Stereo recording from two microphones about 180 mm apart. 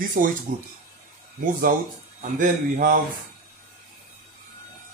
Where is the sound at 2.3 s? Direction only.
45° right (ahead or behind).